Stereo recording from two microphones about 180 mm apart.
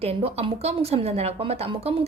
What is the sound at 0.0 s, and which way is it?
A woman's voice, 35° right (ahead or behind).